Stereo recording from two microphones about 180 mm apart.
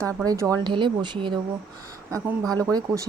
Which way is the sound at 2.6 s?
20° right (ahead or behind).